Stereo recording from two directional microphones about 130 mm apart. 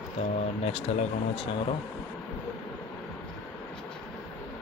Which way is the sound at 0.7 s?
55° left (ahead or behind).